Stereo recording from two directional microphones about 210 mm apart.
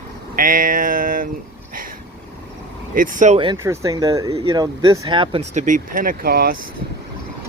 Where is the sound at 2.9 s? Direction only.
40° right (ahead or behind).